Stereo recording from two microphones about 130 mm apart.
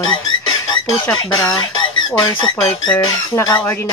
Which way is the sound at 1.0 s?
30° left (ahead or behind).